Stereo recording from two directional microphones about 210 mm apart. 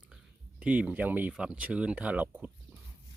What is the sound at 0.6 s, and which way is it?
Speech, 5° right (ahead or behind).